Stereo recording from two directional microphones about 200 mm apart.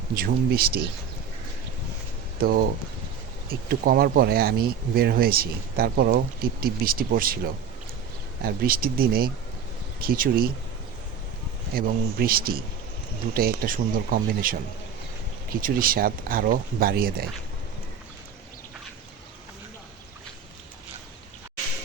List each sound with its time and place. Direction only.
0.1 s speech: 50° right (ahead or behind)
2.4 s speech: 45° right (ahead or behind)
8.4 s speech: 50° right (ahead or behind)
11.7 s speech: 50° right (ahead or behind)